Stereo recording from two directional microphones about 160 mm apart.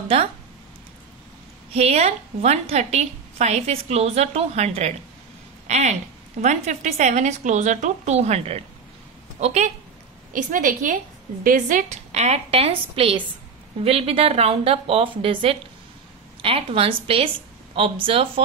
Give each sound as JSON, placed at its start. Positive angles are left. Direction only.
{"t": 0.1, "sound": "a woman's voice", "side_deg": -40}
{"t": 1.7, "sound": "a woman's voice", "side_deg": -40}
{"t": 10.3, "sound": "a woman's voice", "side_deg": -55}